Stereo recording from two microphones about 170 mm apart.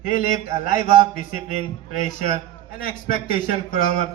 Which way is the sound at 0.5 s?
35° right (ahead or behind).